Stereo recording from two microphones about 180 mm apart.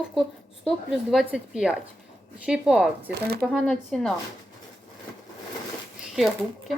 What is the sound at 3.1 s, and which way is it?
Speech, 60° right (ahead or behind).